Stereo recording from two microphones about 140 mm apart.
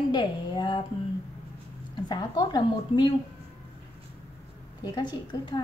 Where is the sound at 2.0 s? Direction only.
30° left (ahead or behind).